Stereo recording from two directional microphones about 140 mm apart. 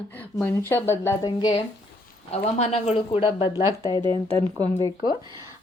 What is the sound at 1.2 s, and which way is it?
Speech, 30° left (ahead or behind).